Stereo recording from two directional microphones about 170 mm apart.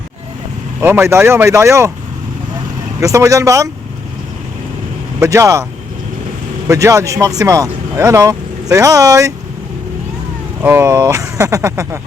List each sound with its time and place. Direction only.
0.8 s speech: 15° right (ahead or behind)
3.0 s speech: 20° right (ahead or behind)
5.2 s speech: 20° right (ahead or behind)
6.7 s speech: 20° right (ahead or behind)
10.6 s speech: 15° right (ahead or behind)